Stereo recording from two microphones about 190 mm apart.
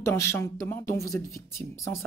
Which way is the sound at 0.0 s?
15° left (ahead or behind).